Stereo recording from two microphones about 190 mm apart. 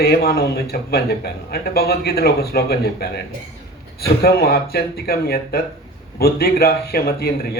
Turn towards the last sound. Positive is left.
turn(degrees=55)  # may be behind; listen again after turning